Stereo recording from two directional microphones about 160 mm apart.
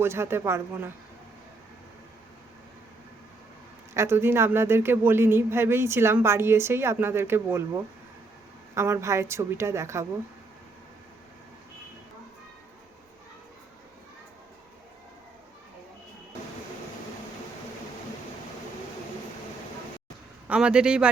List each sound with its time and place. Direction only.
0.0 s speech: 15° right (ahead or behind)
3.9 s speech: 15° right (ahead or behind)
20.5 s speech: 5° right (ahead or behind)